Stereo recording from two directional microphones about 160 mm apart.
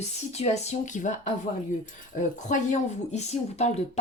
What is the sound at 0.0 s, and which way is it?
Speech, 45° left (ahead or behind).